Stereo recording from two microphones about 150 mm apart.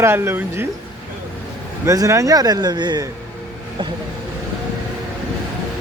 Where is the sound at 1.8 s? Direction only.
20° right (ahead or behind).